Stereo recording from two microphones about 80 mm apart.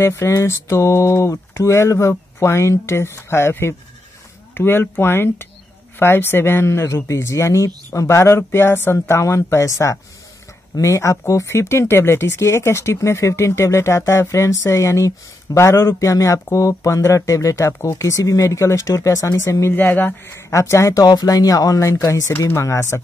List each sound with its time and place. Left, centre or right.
0.0 s speech: left
19.7 s speech: left
21.0 s speech: left